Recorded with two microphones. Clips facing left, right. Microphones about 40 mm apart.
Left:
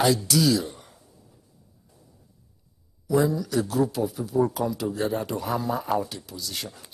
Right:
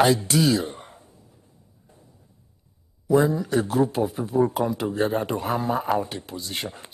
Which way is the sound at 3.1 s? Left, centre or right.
Right.